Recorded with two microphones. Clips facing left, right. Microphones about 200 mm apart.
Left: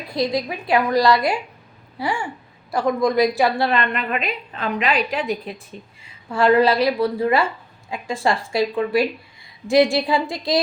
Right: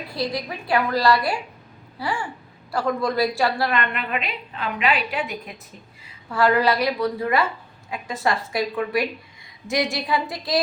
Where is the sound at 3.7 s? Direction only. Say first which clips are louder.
Left 3 dB; 35° left (ahead or behind).